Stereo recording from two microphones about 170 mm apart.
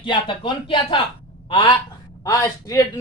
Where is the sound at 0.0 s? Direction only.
30° left (ahead or behind).